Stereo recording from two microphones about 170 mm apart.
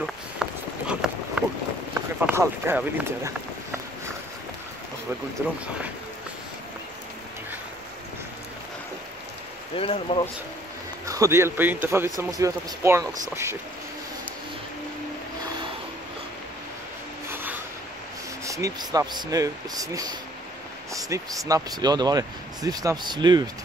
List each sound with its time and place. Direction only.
0.0 s a sound: 5° right (ahead or behind)
2.2 s a man's voice: 15° right (ahead or behind)
5.4 s a man's voice: 15° right (ahead or behind)
9.8 s speech: 35° left (ahead or behind)
11.1 s a man's voice: 15° right (ahead or behind)
17.3 s train: 10° right (ahead or behind)
18.4 s speech: 20° right (ahead or behind)